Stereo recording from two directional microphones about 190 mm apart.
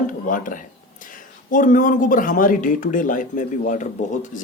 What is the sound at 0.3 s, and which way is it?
Speech, 45° left (ahead or behind).